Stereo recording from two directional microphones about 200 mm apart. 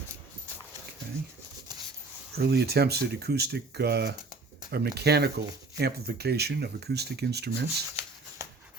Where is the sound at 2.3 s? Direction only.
55° right (ahead or behind).